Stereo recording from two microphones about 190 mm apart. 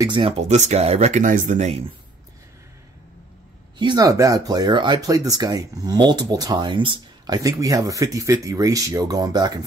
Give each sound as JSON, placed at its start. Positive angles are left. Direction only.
{"t": 0.0, "sound": "speech", "side_deg": -25}
{"t": 0.5, "sound": "speech", "side_deg": -35}
{"t": 3.7, "sound": "speech", "side_deg": -25}